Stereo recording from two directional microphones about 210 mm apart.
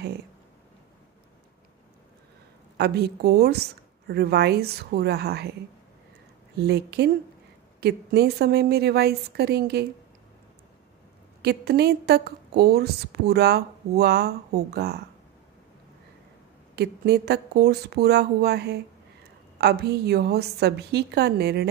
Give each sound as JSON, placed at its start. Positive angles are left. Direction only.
{"t": 2.8, "sound": "a woman's voice", "side_deg": -50}
{"t": 6.6, "sound": "a woman's voice", "side_deg": -50}
{"t": 11.4, "sound": "a woman's voice", "side_deg": -50}
{"t": 16.7, "sound": "a woman's voice", "side_deg": -50}